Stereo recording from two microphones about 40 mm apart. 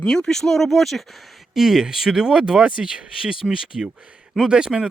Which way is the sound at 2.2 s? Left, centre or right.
Centre.